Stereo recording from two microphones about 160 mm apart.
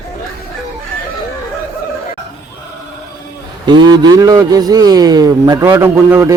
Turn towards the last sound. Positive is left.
turn(degrees=-20)  # may be behind; listen again after turning